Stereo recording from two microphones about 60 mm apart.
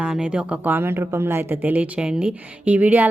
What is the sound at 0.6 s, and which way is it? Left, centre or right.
Speech, right.